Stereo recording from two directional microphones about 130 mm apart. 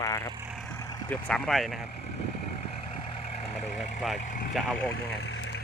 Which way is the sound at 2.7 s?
45° left (ahead or behind).